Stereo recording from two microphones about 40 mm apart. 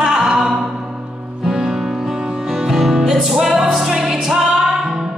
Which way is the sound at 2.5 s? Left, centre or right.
Centre.